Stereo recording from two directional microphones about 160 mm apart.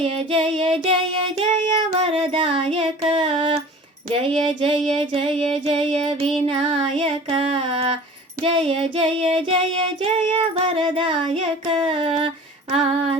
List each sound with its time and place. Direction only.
0.0 s music: 35° right (ahead or behind)